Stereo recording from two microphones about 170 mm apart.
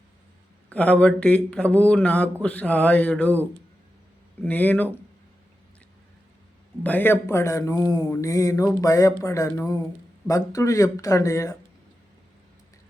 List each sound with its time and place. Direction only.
0.7 s speech: 10° left (ahead or behind)
4.4 s speech: 10° left (ahead or behind)
6.8 s speech: 10° left (ahead or behind)